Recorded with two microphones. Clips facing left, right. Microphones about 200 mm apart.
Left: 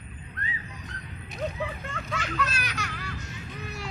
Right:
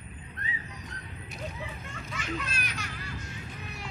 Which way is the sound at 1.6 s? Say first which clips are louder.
Left 7 dB; 80° left.